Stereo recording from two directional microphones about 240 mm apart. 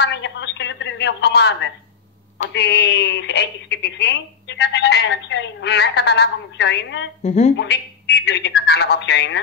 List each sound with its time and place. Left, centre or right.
0.0 s a sound: left
2.5 s a woman's voice: left
7.2 s a woman's voice: left
7.5 s a woman's voice: left